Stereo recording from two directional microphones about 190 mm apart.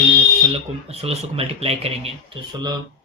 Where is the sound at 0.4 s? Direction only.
30° right (ahead or behind).